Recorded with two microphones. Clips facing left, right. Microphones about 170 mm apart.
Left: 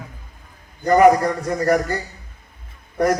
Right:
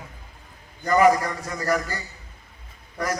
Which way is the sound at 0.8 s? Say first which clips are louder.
Left 5 dB; 55° left (ahead or behind).